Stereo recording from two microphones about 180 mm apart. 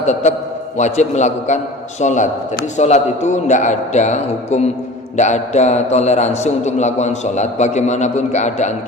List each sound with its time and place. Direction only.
0.0 s a man's voice: 40° left (ahead or behind)